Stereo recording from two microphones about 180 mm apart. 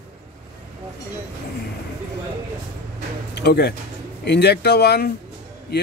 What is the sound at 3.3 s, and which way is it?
Speech, 65° left (ahead or behind).